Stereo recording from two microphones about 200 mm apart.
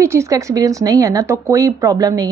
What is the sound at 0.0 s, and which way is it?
A woman's voice, 15° right (ahead or behind).